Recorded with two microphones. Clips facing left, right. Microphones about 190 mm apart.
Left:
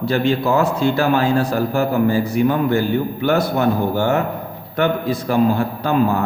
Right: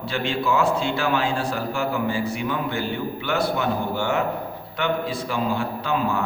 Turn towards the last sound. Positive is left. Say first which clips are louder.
# left 6 dB
turn(degrees=45)  # may be behind; listen again after turning